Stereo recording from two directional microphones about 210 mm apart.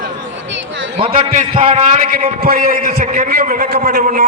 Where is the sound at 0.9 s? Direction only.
25° right (ahead or behind).